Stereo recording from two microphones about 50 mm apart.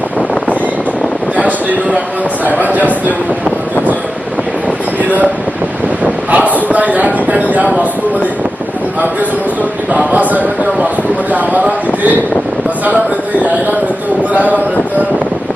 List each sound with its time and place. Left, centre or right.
2.4 s speech: right
6.3 s a sound: right
9.9 s speech: right